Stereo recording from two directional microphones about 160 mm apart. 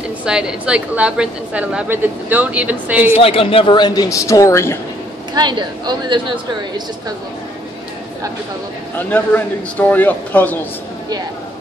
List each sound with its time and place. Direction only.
0.2 s speech: 5° right (ahead or behind)
3.2 s a woman's voice: 35° left (ahead or behind); by 4.7 s 20° left (ahead or behind)
5.3 s speech: 30° right (ahead or behind)
8.9 s a man's voice: 10° left (ahead or behind)